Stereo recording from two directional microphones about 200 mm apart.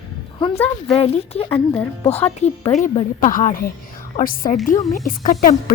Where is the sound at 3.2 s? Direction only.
40° left (ahead or behind).